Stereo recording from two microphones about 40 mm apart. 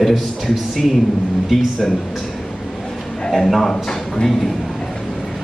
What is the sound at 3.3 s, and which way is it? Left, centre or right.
Speech, centre.